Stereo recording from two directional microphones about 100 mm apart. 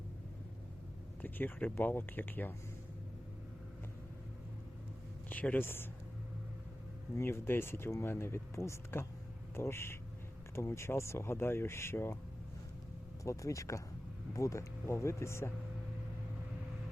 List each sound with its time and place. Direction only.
1.2 s speech: 20° left (ahead or behind)
5.3 s speech: 15° left (ahead or behind)
7.2 s speech: 25° left (ahead or behind)
13.2 s speech: 30° left (ahead or behind)